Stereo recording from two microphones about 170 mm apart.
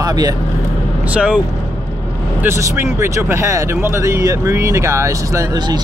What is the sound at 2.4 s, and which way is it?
Speech, 15° right (ahead or behind).